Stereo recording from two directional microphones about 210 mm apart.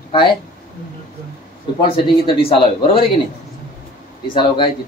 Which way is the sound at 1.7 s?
25° left (ahead or behind).